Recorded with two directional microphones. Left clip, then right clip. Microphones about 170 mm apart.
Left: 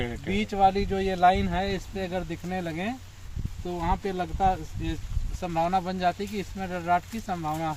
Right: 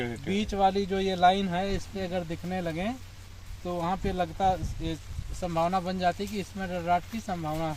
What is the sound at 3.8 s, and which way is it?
Speech, 35° right (ahead or behind).